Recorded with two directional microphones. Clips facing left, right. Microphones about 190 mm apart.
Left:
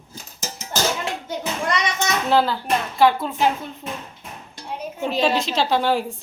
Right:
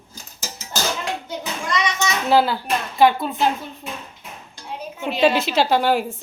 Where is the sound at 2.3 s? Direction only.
10° right (ahead or behind).